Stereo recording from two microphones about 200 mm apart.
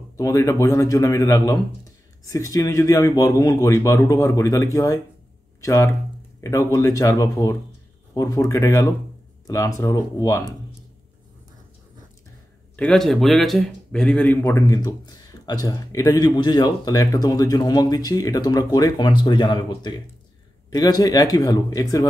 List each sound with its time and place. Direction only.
0.2 s a man's voice: 15° left (ahead or behind)
12.7 s a man's voice: 5° left (ahead or behind)